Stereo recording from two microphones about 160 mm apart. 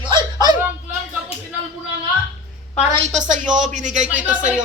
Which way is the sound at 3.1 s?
50° right (ahead or behind).